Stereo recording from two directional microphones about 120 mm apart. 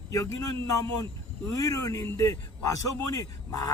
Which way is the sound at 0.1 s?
30° left (ahead or behind).